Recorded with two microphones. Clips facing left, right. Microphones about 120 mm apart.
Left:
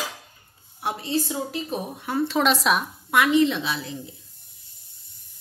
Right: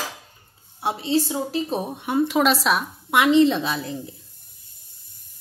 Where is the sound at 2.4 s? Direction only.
Centre (ahead or behind).